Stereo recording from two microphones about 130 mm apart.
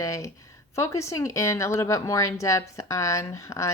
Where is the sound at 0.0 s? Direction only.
25° left (ahead or behind).